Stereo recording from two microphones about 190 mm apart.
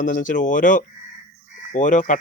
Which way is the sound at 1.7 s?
40° left (ahead or behind).